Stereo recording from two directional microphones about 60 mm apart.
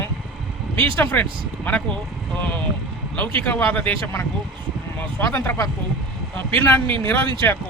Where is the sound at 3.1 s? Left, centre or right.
Left.